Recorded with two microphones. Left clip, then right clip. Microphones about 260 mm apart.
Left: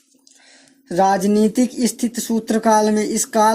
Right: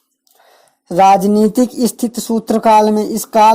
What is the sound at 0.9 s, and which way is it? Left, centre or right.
Speech, right.